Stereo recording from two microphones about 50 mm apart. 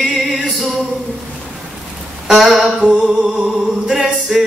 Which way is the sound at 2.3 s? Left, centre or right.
Centre.